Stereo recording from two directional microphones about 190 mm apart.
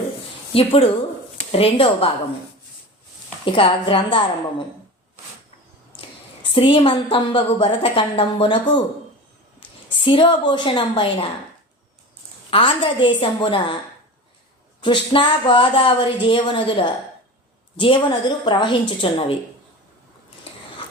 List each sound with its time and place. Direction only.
0.5 s speech: 30° left (ahead or behind)
3.5 s speech: 30° left (ahead or behind)
6.0 s a woman's voice: 30° left (ahead or behind)
10.0 s speech: 25° left (ahead or behind)
12.5 s speech: 30° left (ahead or behind)
14.8 s speech: 25° left (ahead or behind)